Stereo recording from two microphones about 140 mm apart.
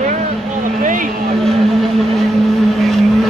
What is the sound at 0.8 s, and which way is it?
Vehicle, 70° right (ahead or behind).